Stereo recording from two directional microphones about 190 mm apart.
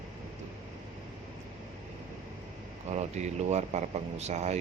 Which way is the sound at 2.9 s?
35° right (ahead or behind).